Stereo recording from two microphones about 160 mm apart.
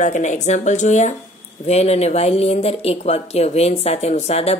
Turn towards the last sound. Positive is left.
turn(degrees=40)  # may be behind; listen again after turning